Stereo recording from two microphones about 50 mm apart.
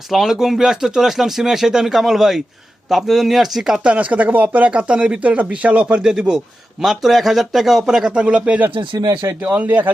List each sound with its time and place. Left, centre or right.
0.1 s speech: centre
3.8 s speech: right
6.0 s speech: centre
6.9 s speech: centre
8.2 s speech: right
9.2 s a man's voice: right
9.6 s speech: right